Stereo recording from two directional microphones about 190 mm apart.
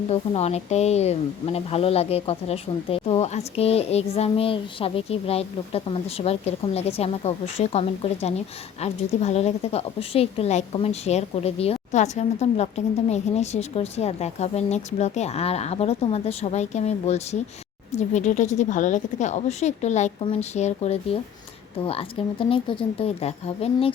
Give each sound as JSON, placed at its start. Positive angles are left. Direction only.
{"t": 0.1, "sound": "a woman's voice", "side_deg": 35}